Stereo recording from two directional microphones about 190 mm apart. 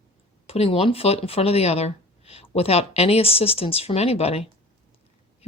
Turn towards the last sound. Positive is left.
turn(degrees=30)  # may be behind; listen again after turning